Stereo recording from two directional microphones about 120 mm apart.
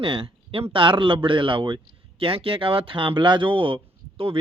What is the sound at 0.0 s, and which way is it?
Speech, 45° right (ahead or behind).